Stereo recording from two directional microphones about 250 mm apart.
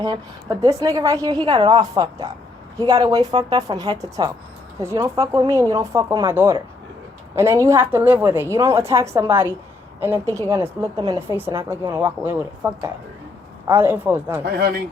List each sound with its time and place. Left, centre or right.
0.0 s speech: centre
10.5 s speech: centre
14.4 s speech: right